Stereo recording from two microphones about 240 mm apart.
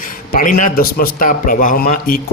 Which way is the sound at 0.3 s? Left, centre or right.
Left.